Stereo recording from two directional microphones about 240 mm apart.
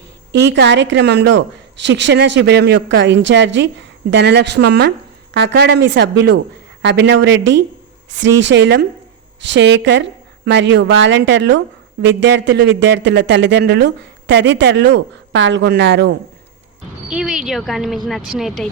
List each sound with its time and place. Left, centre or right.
0.3 s a man's voice: right
17.1 s a woman's voice: centre